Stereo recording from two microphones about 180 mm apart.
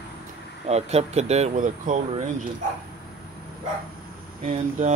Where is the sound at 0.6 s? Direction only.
35° right (ahead or behind).